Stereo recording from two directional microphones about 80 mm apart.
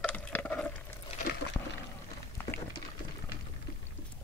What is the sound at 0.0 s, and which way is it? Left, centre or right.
Stir, centre.